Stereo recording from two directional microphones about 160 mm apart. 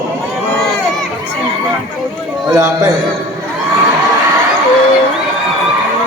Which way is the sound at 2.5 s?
20° right (ahead or behind).